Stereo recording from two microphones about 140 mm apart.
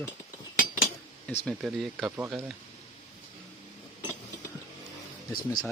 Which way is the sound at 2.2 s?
15° right (ahead or behind).